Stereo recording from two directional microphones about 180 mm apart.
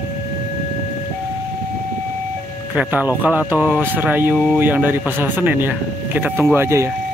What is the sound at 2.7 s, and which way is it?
Speech, 10° right (ahead or behind).